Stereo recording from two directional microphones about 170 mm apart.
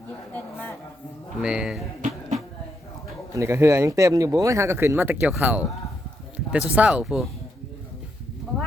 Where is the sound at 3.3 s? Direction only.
15° right (ahead or behind).